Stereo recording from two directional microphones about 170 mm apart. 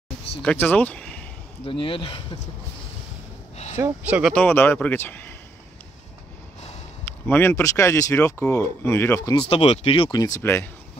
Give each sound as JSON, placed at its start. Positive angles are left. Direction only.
{"t": 0.4, "sound": "speech", "side_deg": 10}
{"t": 1.6, "sound": "speech", "side_deg": 30}
{"t": 3.7, "sound": "speech", "side_deg": -15}
{"t": 4.2, "sound": "speech", "side_deg": 5}
{"t": 7.1, "sound": "speech", "side_deg": 15}
{"t": 9.4, "sound": "speech", "side_deg": 35}
{"t": 10.1, "sound": "speech", "side_deg": 20}